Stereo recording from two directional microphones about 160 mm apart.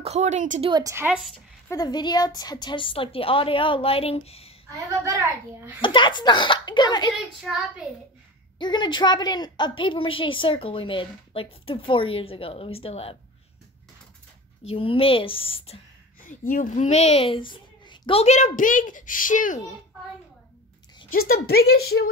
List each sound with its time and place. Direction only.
0.0 s speech: 45° right (ahead or behind)
0.6 s a woman's voice: 30° right (ahead or behind)
1.0 s a child's voice: 5° right (ahead or behind)
1.7 s a woman's voice: 25° left (ahead or behind)
4.6 s a woman's voice: 20° right (ahead or behind)
5.8 s speech: 30° left (ahead or behind)
7.4 s a child's voice: centre (ahead or behind)
8.5 s a woman's voice: 30° left (ahead or behind)
14.7 s a woman's voice: 35° left (ahead or behind)
16.3 s a woman's voice: 55° left (ahead or behind)
21.1 s a woman's voice: 70° left (ahead or behind)